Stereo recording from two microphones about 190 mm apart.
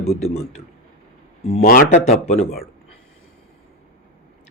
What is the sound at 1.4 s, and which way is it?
Speech, 35° left (ahead or behind).